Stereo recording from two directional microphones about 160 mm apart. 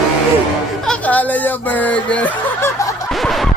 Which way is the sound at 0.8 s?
5° left (ahead or behind).